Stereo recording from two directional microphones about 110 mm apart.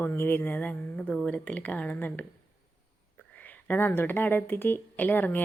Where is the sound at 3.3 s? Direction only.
15° left (ahead or behind).